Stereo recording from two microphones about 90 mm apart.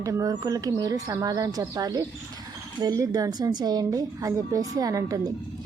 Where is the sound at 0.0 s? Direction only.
40° right (ahead or behind).